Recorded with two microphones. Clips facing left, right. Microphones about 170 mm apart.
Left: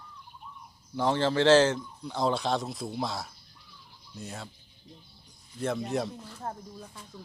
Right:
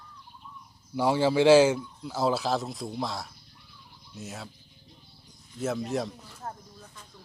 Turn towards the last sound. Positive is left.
turn(degrees=30)  # may be behind; listen again after turning